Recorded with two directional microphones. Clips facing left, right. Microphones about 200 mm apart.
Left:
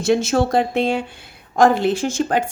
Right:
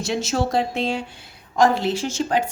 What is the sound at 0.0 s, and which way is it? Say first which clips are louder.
A woman's voice: left 6 dB; 55° left (ahead or behind).